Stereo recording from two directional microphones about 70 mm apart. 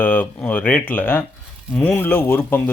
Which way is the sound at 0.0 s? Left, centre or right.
Left.